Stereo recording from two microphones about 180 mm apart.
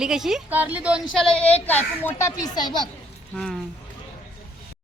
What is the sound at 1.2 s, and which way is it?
A woman's voice, 5° left (ahead or behind).